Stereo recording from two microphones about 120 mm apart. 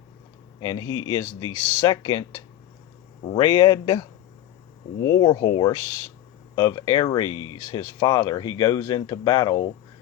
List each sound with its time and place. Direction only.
0.6 s speech: 35° left (ahead or behind)